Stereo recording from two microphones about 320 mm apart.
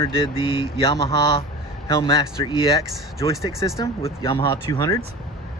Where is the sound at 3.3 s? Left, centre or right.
Centre.